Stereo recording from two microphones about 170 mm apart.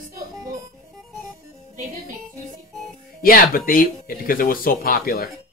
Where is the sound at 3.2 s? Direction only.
55° left (ahead or behind).